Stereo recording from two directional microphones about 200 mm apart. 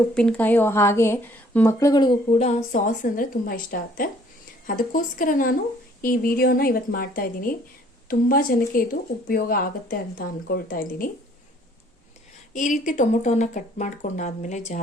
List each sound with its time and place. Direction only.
0.1 s a woman's voice: 5° left (ahead or behind); by 2.1 s 20° left (ahead or behind)
2.7 s speech: 40° left (ahead or behind)
12.5 s speech: 40° left (ahead or behind)